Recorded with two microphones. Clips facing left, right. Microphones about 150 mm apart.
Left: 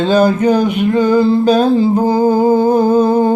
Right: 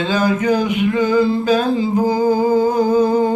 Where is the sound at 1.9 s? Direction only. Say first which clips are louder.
Left 3 dB; 30° left (ahead or behind).